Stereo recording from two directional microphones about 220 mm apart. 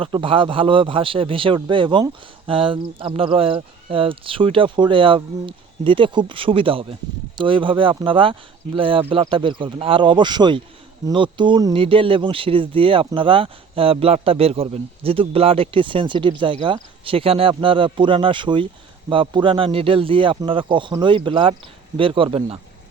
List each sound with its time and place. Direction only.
0.0 s speech: 25° right (ahead or behind)